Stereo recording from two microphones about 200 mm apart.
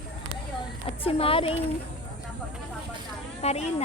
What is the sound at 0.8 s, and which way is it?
Speech, 30° left (ahead or behind).